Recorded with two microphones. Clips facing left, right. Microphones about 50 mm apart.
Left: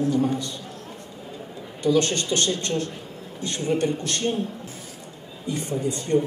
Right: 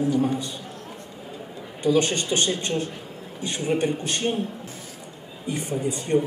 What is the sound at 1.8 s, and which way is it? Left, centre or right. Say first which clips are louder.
Speech: even; centre.